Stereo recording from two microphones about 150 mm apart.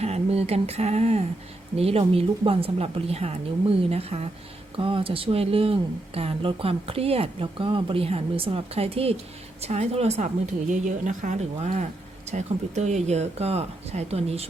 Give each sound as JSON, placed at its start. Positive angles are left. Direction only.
{"t": 0.0, "sound": "a woman's voice", "side_deg": -45}